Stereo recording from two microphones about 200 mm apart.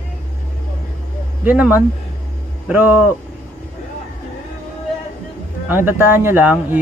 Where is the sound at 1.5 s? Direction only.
10° right (ahead or behind).